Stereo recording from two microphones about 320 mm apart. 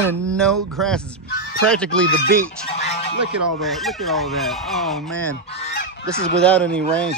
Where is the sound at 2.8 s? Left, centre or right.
Centre.